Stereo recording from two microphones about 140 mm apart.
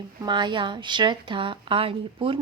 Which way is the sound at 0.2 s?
30° right (ahead or behind).